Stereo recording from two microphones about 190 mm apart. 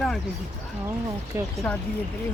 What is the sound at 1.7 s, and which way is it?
Speech, 5° left (ahead or behind).